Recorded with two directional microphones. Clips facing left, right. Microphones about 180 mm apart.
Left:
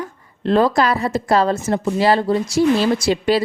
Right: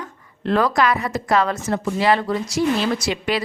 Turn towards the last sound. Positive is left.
turn(degrees=30)  # may be behind; listen again after turning